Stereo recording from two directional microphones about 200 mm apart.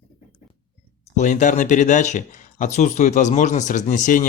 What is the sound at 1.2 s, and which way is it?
Speech, 40° left (ahead or behind).